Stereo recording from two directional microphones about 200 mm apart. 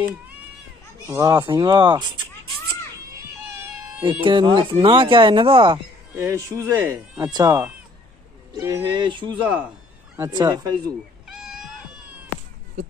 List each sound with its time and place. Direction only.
1.0 s speech: 15° right (ahead or behind)
4.0 s speech: 25° right (ahead or behind)
6.1 s speech: 15° right (ahead or behind)
11.2 s cat: centre (ahead or behind)